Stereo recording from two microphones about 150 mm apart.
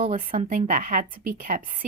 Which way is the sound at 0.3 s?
45° right (ahead or behind).